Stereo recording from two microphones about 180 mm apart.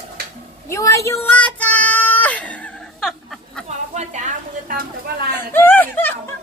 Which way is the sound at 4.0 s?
45° right (ahead or behind).